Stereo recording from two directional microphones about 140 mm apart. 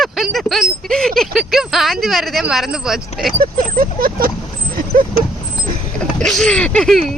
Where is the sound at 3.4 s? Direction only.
90° right.